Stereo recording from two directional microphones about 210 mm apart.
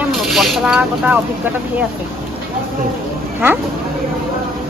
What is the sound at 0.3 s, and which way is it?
Speech, centre (ahead or behind).